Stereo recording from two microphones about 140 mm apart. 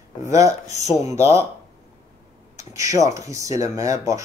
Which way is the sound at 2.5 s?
20° right (ahead or behind).